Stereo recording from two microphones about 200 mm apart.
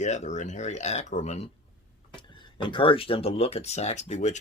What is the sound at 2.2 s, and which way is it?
Speech, 25° left (ahead or behind).